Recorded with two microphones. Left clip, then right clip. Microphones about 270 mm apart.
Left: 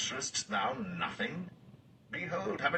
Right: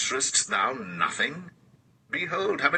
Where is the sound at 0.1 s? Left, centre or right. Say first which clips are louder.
Right 9 dB; right.